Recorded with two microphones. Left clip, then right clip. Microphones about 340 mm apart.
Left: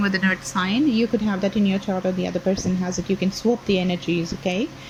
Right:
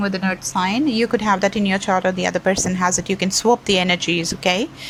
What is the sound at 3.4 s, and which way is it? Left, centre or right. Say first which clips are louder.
Speech: right 6 dB; right.